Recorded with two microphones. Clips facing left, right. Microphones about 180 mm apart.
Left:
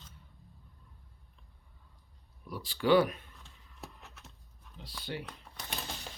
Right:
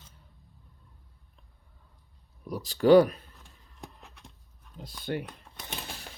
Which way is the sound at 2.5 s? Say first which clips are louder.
Right 7 dB; 40° right (ahead or behind).